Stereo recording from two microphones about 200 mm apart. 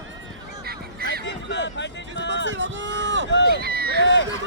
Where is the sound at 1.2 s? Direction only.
65° left (ahead or behind).